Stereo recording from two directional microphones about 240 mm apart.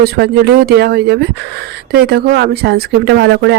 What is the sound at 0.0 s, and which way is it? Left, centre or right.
Speech, right.